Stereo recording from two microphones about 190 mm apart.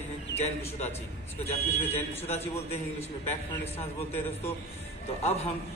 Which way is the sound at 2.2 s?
35° left (ahead or behind).